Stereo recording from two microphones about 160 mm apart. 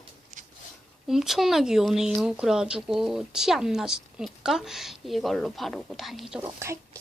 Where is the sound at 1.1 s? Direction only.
Centre (ahead or behind).